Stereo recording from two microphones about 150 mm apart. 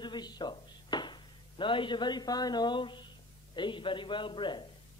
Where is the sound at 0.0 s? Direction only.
30° left (ahead or behind).